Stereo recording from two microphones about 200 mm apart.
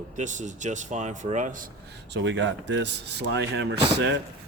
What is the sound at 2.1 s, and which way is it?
Speech, 65° right (ahead or behind).